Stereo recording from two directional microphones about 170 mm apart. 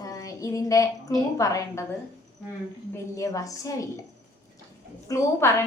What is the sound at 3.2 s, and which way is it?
Speech, 20° left (ahead or behind).